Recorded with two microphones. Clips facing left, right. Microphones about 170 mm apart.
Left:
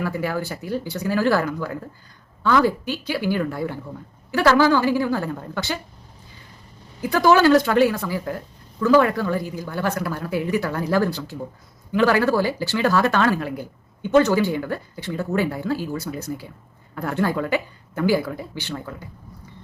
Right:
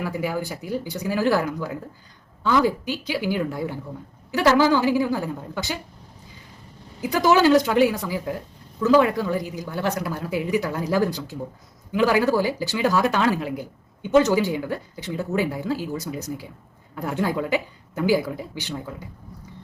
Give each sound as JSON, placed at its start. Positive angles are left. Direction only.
{"t": 0.0, "sound": "speech", "side_deg": -15}
{"t": 7.0, "sound": "speech", "side_deg": -15}